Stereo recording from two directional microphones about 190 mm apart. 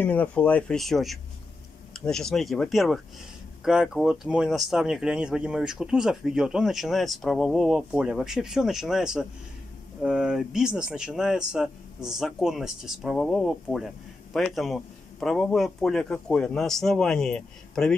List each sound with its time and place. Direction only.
0.0 s speech: 10° left (ahead or behind)